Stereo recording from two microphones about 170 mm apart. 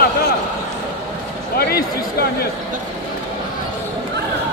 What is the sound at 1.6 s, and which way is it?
Speech, 65° left (ahead or behind).